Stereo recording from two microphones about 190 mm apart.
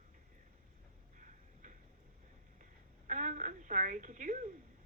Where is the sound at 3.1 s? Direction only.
40° right (ahead or behind).